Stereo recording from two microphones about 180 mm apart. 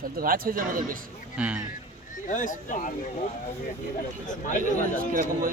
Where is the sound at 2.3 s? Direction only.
45° left (ahead or behind).